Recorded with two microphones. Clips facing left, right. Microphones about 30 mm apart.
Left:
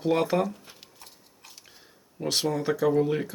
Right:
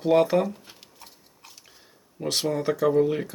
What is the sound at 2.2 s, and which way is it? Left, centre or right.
Cutlery, centre.